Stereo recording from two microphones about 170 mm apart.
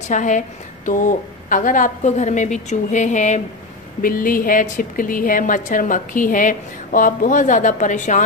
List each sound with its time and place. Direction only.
0.1 s a woman's voice: 45° left (ahead or behind)
4.0 s a woman's voice: 55° left (ahead or behind)